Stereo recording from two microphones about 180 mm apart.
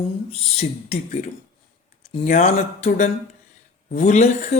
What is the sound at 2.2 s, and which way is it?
Speech, 45° left (ahead or behind).